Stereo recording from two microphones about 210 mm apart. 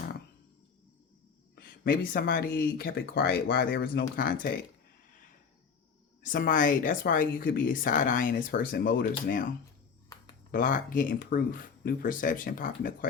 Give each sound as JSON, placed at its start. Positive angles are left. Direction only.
{"t": 1.5, "sound": "speech", "side_deg": 45}
{"t": 6.2, "sound": "speech", "side_deg": 40}